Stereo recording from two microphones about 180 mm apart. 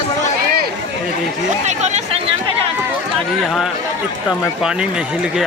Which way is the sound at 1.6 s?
40° right (ahead or behind).